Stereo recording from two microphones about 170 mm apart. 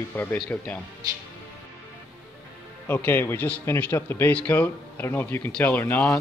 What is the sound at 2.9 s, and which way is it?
Speech, 10° left (ahead or behind).